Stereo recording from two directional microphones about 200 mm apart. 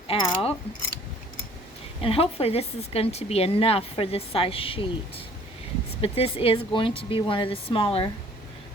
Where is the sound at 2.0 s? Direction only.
30° left (ahead or behind).